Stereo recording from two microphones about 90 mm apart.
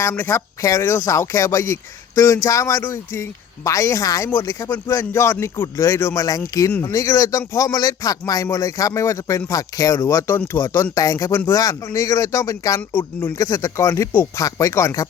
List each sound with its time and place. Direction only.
0.0 s speech: 30° left (ahead or behind)
6.1 s speech: 40° left (ahead or behind)
10.9 s speech: 40° left (ahead or behind)
11.3 s speech: 30° left (ahead or behind)
13.0 s speech: 25° left (ahead or behind)
13.4 s speech: 40° left (ahead or behind)